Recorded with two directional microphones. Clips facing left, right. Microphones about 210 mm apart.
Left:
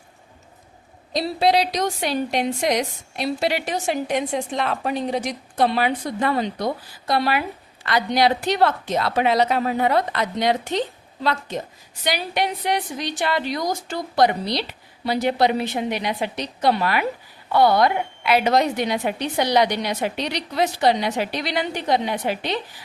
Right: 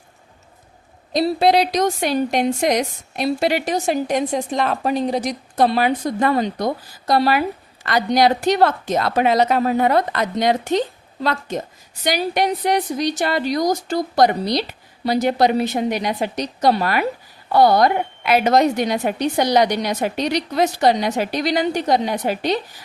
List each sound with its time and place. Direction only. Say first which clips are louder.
1.1 s a woman's voice: right 4 dB; 50° right (ahead or behind)